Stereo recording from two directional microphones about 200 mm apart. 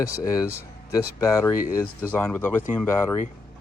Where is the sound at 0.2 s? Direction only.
15° left (ahead or behind).